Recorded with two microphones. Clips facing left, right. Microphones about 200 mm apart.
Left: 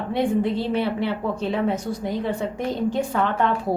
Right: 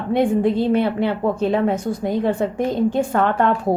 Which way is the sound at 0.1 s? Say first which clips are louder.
Right 5 dB; 50° right (ahead or behind).